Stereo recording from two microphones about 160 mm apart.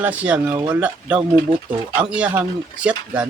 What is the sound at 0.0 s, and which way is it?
Speech, 10° right (ahead or behind).